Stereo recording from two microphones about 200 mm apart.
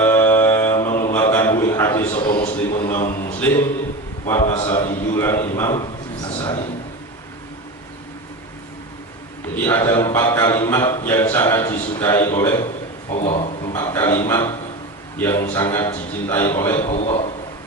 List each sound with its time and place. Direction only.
0.0 s a sound: 10° left (ahead or behind)
2.2 s a man's voice: 20° left (ahead or behind)
4.6 s speech: 20° left (ahead or behind)
5.1 s a man's voice: 10° left (ahead or behind)
5.7 s a sound: 25° left (ahead or behind)
9.6 s a man's voice: 10° left (ahead or behind)
13.1 s a man's voice: 35° left (ahead or behind)
13.7 s a man's voice: 15° left (ahead or behind)
16.9 s a man's voice: 35° left (ahead or behind)